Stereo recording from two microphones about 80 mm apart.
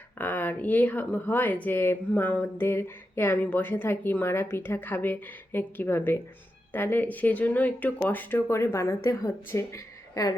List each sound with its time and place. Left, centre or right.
0.2 s a woman's voice: left